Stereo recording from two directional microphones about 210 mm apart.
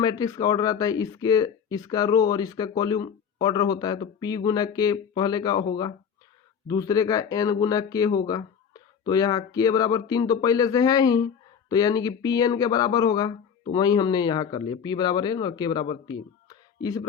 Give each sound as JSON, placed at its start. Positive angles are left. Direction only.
{"t": 0.0, "sound": "speech", "side_deg": 15}